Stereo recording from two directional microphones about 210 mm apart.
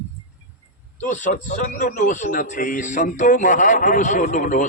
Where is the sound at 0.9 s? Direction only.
35° left (ahead or behind).